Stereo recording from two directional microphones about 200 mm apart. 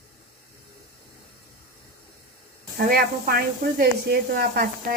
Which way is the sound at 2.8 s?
45° right (ahead or behind).